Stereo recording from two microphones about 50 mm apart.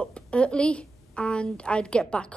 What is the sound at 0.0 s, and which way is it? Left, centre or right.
A woman's voice, left.